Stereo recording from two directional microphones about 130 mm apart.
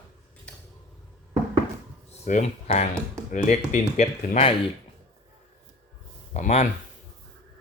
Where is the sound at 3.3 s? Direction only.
80° left; by 4.5 s 60° left (ahead or behind).